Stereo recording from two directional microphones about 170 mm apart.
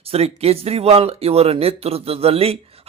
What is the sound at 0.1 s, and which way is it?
Speech, 35° right (ahead or behind).